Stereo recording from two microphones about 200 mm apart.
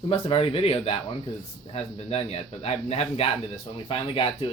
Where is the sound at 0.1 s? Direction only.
30° left (ahead or behind).